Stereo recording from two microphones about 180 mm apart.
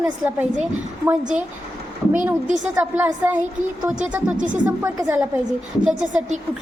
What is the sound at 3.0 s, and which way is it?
Speech, 10° right (ahead or behind).